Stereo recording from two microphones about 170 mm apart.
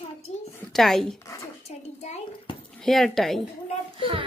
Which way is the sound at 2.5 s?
30° left (ahead or behind).